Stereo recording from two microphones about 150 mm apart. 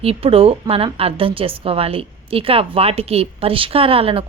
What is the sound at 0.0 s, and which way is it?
A woman's voice, 40° right (ahead or behind).